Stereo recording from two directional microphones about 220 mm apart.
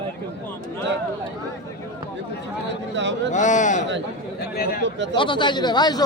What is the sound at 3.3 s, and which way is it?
Speech, 35° left (ahead or behind).